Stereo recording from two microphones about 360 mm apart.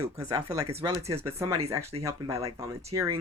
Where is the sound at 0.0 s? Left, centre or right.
Centre.